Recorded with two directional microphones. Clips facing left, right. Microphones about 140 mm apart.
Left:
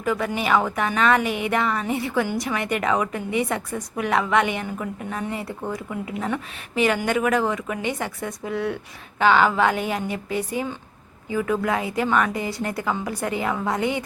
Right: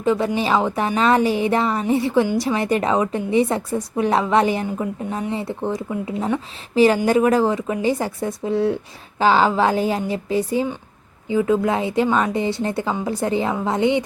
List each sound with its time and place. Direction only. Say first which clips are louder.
0.0 s a woman's voice: right 5 dB; 25° right (ahead or behind)
4.6 s a woman's voice: right 5 dB; 20° right (ahead or behind)